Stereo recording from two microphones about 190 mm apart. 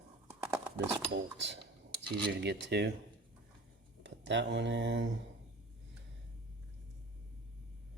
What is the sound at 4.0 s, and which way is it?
Speech, 70° right (ahead or behind).